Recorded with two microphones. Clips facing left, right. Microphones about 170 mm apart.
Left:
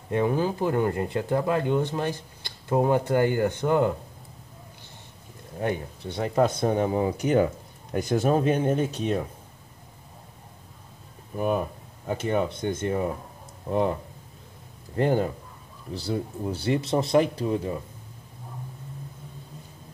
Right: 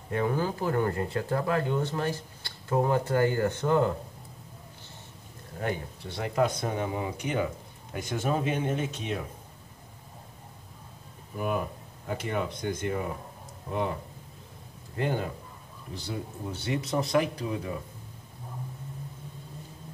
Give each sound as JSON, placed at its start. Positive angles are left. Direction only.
{"t": 0.1, "sound": "speech", "side_deg": 20}
{"t": 5.6, "sound": "speech", "side_deg": 20}
{"t": 11.3, "sound": "speech", "side_deg": 30}
{"t": 15.0, "sound": "speech", "side_deg": 35}